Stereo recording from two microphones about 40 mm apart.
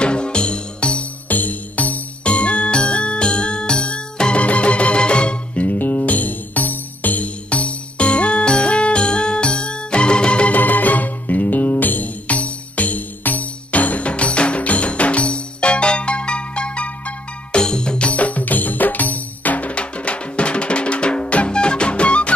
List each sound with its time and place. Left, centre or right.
0.0 s music: left
1.3 s music: left
2.2 s music: left
5.5 s music: left
7.4 s music: left
10.5 s music: left
17.6 s music: left